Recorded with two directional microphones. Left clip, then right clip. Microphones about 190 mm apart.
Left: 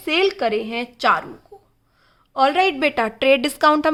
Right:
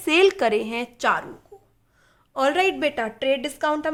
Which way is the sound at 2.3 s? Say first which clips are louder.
Left 4 dB; 5° left (ahead or behind).